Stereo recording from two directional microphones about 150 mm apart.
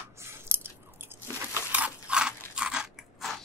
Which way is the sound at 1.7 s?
10° right (ahead or behind).